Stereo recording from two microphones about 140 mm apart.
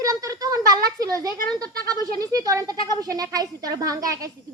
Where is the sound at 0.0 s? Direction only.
25° right (ahead or behind).